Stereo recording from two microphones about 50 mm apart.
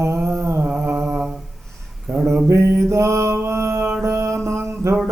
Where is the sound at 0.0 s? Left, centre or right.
Right.